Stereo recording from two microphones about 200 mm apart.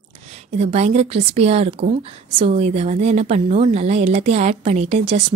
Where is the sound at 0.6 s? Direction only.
30° right (ahead or behind).